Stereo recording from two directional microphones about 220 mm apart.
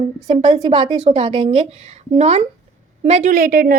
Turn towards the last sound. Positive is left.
turn(degrees=-45)  # may be behind; listen again after turning